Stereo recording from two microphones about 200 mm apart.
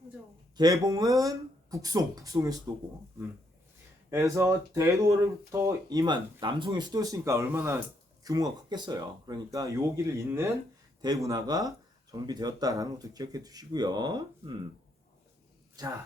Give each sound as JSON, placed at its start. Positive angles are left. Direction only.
{"t": 0.5, "sound": "speech", "side_deg": -20}
{"t": 4.1, "sound": "speech", "side_deg": -15}